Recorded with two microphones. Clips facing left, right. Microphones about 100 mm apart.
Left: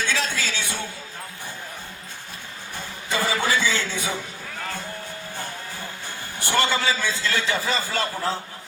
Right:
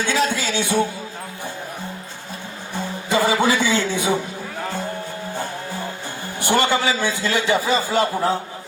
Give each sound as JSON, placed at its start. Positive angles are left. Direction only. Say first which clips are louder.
{"t": 0.0, "sound": "a man's voice", "louder": "right 6 dB", "side_deg": -15}
{"t": 3.1, "sound": "a man's voice", "louder": "right 5 dB", "side_deg": -15}
{"t": 6.4, "sound": "a man's voice", "louder": "right 4 dB", "side_deg": -15}